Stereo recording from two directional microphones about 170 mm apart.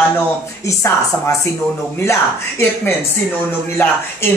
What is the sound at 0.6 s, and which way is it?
Speech, 15° left (ahead or behind).